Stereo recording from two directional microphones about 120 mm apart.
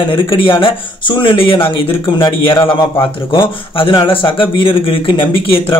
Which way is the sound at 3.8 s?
45° left (ahead or behind).